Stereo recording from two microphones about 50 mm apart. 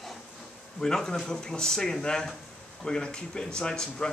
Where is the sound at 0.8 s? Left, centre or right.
Centre.